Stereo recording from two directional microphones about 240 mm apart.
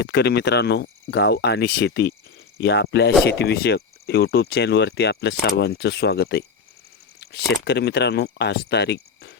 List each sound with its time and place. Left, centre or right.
0.0 s speech: left